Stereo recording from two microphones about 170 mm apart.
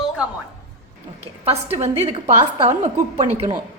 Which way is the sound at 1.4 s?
35° right (ahead or behind).